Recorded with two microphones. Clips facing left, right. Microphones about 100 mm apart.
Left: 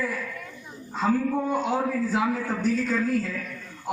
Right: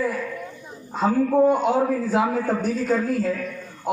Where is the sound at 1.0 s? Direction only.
55° right (ahead or behind).